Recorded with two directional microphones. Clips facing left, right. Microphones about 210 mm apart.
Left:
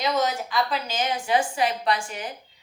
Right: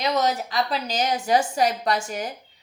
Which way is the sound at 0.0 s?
40° right (ahead or behind).